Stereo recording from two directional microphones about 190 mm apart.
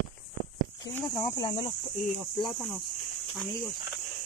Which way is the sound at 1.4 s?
25° left (ahead or behind).